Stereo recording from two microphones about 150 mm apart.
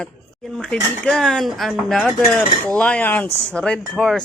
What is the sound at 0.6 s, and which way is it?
Speech, 5° left (ahead or behind).